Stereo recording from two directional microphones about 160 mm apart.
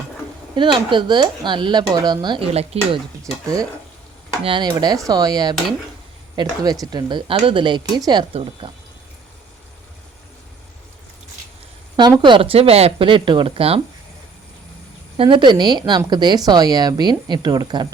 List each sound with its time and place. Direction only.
0.5 s speech: 30° right (ahead or behind)
2.5 s speech: 40° right (ahead or behind)
4.4 s speech: 30° right (ahead or behind)
8.3 s speech: 40° right (ahead or behind)
12.2 s speech: 35° right (ahead or behind)
15.2 s speech: 30° right (ahead or behind)